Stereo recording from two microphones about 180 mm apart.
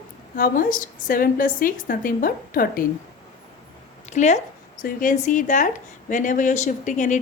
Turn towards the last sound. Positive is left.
turn(degrees=45)  # may be behind; listen again after turning